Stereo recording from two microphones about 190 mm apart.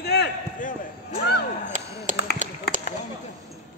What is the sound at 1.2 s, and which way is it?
Speech, 60° left (ahead or behind).